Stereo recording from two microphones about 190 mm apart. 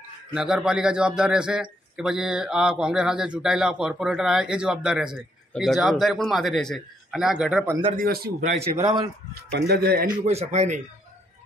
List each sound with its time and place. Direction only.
0.3 s a man's voice: 5° right (ahead or behind)
7.9 s a man's voice: 50° right (ahead or behind)
8.7 s speech: 20° right (ahead or behind)
9.3 s speech: 60° right (ahead or behind)
10.2 s speech: 35° right (ahead or behind)